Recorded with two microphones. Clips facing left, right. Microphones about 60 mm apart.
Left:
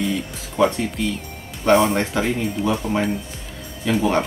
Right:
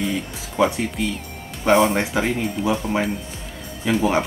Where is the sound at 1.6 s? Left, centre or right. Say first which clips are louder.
Even; centre.